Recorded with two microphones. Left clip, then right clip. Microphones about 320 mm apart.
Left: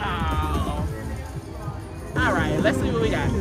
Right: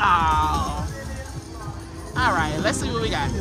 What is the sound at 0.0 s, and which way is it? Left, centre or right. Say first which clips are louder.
Music: right 9 dB; centre.